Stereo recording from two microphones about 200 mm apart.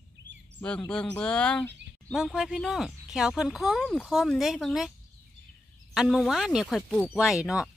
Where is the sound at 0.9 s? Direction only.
5° left (ahead or behind).